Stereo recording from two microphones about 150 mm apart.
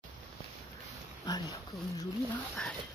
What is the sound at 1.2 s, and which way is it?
Speech, 25° left (ahead or behind).